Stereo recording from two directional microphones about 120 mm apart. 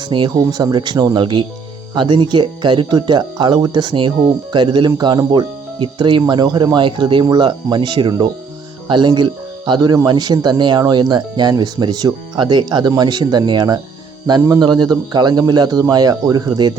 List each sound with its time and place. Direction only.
0.0 s speech: 40° right (ahead or behind)